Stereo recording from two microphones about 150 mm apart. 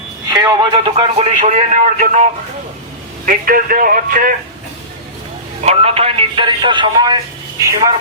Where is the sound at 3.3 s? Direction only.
70° right (ahead or behind).